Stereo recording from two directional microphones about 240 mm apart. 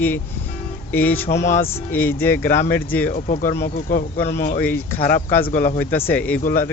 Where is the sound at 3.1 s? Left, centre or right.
Left.